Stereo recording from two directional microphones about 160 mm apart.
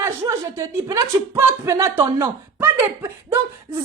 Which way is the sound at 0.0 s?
20° right (ahead or behind).